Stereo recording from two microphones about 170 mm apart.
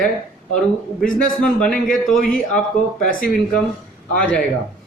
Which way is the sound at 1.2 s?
5° left (ahead or behind).